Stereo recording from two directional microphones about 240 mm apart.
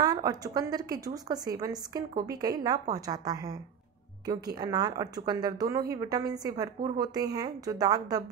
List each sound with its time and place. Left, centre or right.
0.0 s a woman's voice: centre